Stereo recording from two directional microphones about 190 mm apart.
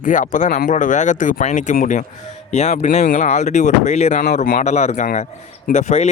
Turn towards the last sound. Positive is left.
turn(degrees=35)  # may be behind; listen again after turning